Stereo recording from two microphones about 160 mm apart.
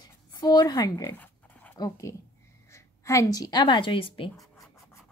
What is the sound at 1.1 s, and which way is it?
Dog, 10° left (ahead or behind).